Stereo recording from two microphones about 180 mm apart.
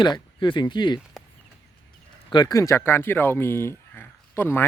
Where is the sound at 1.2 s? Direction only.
Centre (ahead or behind).